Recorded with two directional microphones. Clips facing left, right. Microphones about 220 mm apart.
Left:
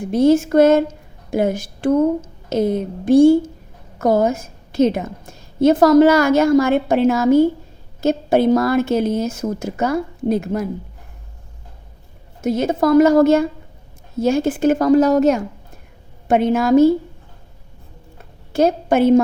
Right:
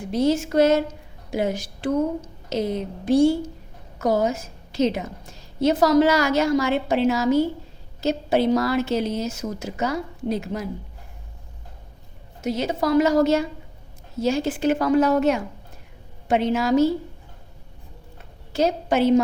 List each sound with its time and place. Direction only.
0.1 s a woman's voice: 50° left (ahead or behind)
12.4 s a woman's voice: 50° left (ahead or behind)
18.5 s a woman's voice: 50° left (ahead or behind)